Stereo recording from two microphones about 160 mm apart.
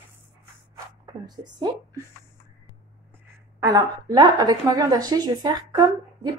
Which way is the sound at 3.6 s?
25° right (ahead or behind).